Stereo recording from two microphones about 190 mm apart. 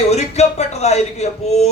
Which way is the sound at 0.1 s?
35° left (ahead or behind).